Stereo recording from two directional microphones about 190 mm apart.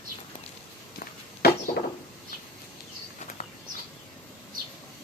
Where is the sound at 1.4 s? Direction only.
55° left (ahead or behind).